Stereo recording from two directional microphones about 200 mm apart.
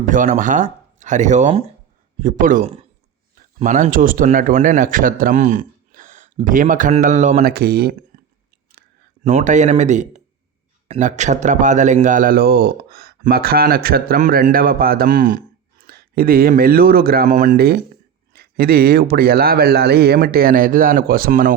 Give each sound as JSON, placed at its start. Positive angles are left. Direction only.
{"t": 0.0, "sound": "speech", "side_deg": -40}
{"t": 2.2, "sound": "a man's voice", "side_deg": -40}
{"t": 9.2, "sound": "a man's voice", "side_deg": -35}